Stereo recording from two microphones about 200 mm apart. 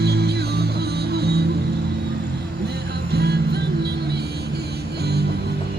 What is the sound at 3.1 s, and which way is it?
Music, 55° right (ahead or behind).